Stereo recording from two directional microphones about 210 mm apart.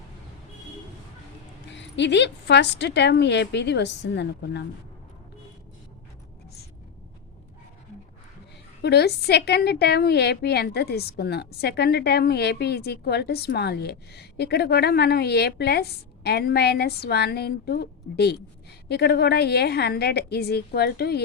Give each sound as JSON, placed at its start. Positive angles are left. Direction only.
{"t": 1.7, "sound": "a woman's voice", "side_deg": 60}
{"t": 8.8, "sound": "a woman's voice", "side_deg": 50}